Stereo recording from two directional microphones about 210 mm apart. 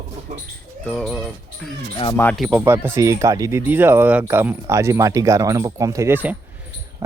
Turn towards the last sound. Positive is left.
turn(degrees=-10)  # may be behind; listen again after turning